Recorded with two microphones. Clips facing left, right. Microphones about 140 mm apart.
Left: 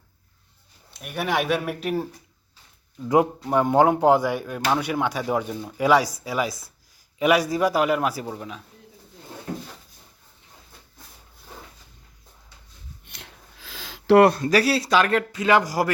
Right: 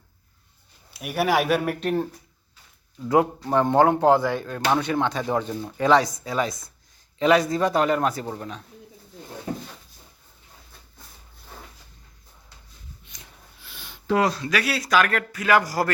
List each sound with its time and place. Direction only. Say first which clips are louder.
0.9 s speech: right 3 dB; 5° right (ahead or behind)
3.5 s a man's voice: even; 10° left (ahead or behind)
13.1 s speech: left 3 dB; 80° left; by 15.9 s 20° left (ahead or behind)